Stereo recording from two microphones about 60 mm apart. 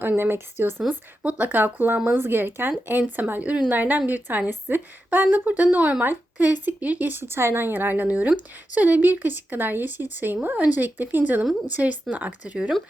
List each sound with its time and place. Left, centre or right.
0.0 s speech: right
1.2 s speech: right